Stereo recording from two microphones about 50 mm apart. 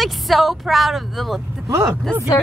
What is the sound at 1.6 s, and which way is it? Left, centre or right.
Speech, right.